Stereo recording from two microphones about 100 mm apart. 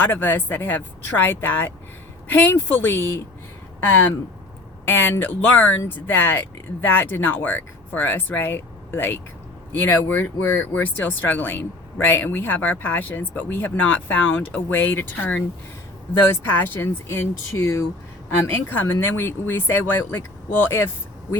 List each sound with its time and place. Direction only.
0.0 s speech: 20° left (ahead or behind)